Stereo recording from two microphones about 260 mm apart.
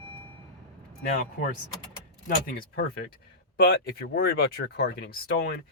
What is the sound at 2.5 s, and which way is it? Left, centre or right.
Speech, left.